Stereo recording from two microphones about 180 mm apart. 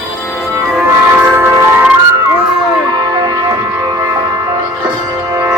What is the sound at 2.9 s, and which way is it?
Music, 20° right (ahead or behind).